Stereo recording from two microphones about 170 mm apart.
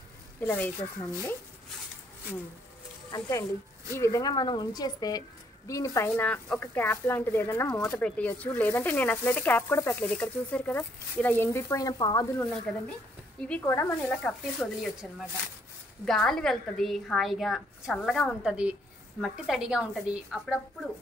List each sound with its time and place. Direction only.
0.4 s speech: 10° left (ahead or behind)
3.1 s speech: 20° left (ahead or behind)
12.7 s a woman's voice: 5° left (ahead or behind)